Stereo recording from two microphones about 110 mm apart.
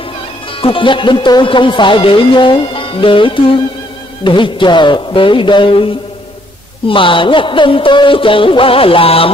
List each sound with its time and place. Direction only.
0.6 s speech: 55° left (ahead or behind)
6.9 s speech: 50° left (ahead or behind)